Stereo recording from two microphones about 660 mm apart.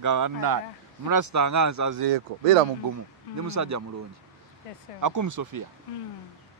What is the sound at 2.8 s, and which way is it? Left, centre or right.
Speech, right.